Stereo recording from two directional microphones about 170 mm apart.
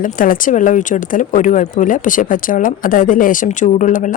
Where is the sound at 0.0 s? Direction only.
55° left (ahead or behind).